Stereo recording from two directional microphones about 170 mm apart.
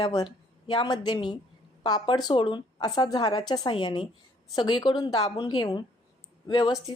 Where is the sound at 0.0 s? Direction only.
25° left (ahead or behind).